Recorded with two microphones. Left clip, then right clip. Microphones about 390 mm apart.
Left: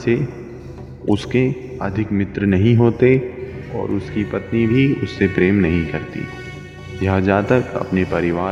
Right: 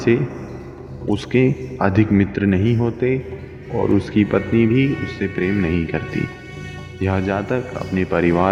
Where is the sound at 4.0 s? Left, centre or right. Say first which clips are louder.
Right 5 dB; right.